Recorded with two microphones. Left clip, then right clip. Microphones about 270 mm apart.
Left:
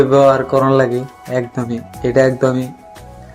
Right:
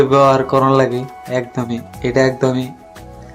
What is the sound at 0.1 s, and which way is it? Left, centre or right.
Speech, centre.